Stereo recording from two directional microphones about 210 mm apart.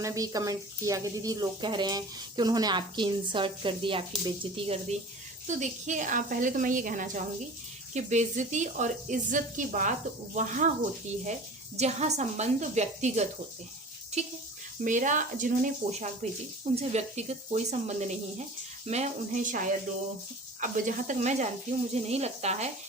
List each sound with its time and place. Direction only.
0.0 s speech: 15° right (ahead or behind); by 10.7 s 35° right (ahead or behind)
11.8 s speech: 30° right (ahead or behind)